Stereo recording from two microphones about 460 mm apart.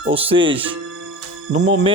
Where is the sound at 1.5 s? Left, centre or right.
Right.